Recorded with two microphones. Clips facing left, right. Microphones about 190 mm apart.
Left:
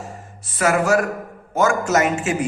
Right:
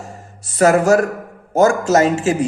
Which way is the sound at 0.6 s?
40° right (ahead or behind).